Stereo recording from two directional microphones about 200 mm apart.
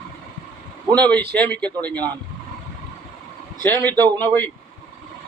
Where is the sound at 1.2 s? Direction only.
55° right (ahead or behind).